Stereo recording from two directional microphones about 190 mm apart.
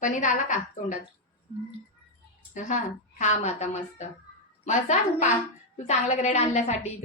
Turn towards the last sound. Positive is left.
turn(degrees=35)  # may be behind; listen again after turning